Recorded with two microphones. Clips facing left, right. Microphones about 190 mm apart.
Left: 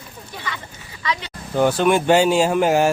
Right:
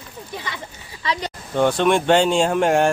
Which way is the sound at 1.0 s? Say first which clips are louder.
Right 1 dB; 35° right (ahead or behind).